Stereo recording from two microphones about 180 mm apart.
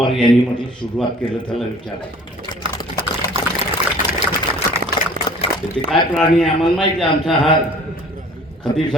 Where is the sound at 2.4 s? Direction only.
25° left (ahead or behind).